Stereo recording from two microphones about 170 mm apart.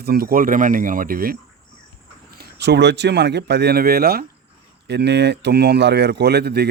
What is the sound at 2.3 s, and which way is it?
Speech, 75° right (ahead or behind).